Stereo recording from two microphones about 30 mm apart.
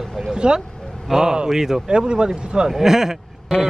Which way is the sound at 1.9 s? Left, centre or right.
Right.